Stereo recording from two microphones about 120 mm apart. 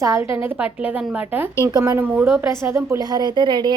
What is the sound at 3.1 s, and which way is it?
Speech, 40° right (ahead or behind).